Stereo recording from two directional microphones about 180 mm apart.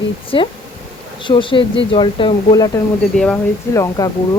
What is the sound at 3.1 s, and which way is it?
Speech, 5° left (ahead or behind).